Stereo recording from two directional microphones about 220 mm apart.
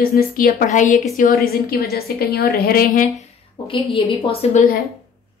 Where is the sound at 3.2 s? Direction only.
25° left (ahead or behind).